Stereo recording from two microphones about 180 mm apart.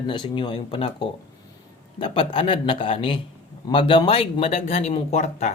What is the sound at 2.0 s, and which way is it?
Speech, 30° left (ahead or behind).